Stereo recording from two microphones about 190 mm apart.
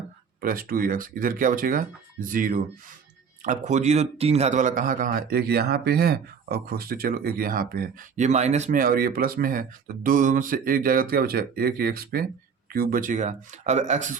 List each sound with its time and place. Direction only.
0.4 s a man's voice: 50° right (ahead or behind)